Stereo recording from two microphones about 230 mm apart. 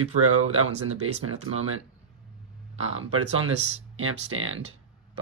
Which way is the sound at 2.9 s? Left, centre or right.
Right.